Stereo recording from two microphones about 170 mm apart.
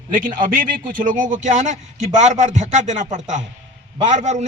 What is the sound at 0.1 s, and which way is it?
A man's voice, 55° right (ahead or behind).